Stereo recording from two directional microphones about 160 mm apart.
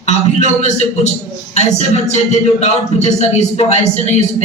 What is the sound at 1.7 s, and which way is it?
A man's voice, 45° left (ahead or behind).